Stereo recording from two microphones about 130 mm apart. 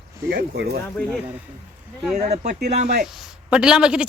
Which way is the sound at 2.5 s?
80° right.